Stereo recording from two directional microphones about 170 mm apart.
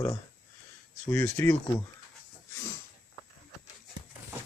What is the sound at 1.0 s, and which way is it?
Speech, 15° left (ahead or behind).